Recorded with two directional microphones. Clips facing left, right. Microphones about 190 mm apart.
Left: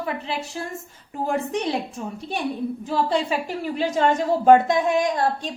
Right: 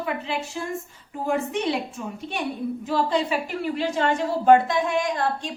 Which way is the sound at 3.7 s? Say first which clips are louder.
Left 4 dB; 40° left (ahead or behind).